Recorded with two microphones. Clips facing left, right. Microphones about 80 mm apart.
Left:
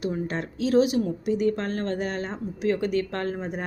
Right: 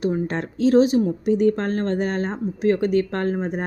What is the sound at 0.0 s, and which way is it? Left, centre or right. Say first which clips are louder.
Speech: right 5 dB; right.